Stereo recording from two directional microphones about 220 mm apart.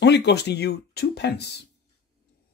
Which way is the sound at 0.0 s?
50° left (ahead or behind).